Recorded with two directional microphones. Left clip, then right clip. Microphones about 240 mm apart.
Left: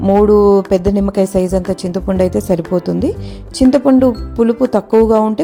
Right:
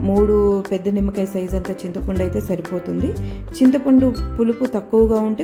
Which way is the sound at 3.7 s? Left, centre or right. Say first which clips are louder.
Left 9 dB; left.